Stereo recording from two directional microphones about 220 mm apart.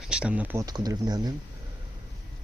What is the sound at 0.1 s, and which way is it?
Speech, 5° right (ahead or behind).